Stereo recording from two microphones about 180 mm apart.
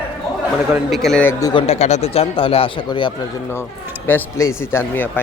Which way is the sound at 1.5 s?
35° left (ahead or behind).